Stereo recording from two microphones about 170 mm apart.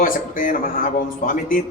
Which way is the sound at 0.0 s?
55° left (ahead or behind).